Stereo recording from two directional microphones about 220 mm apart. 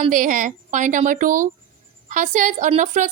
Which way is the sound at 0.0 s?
35° right (ahead or behind).